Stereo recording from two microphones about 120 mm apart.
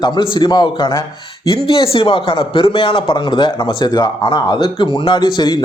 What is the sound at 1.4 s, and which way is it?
A man's voice, 45° left (ahead or behind).